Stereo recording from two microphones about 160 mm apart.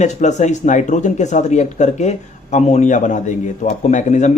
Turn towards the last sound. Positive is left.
turn(degrees=50)  # may be behind; listen again after turning